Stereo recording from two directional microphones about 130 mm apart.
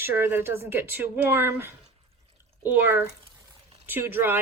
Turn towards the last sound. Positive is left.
turn(degrees=-20)  # may be behind; listen again after turning